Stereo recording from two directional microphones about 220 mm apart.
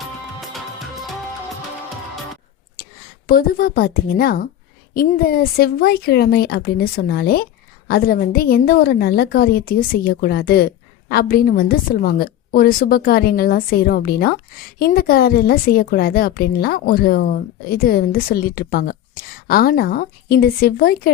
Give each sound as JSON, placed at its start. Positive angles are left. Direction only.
{"t": 3.2, "sound": "a woman's voice", "side_deg": 40}